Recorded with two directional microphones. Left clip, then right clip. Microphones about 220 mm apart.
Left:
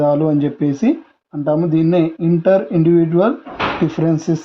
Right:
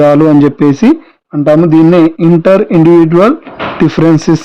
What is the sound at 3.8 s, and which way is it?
Speech, 50° right (ahead or behind).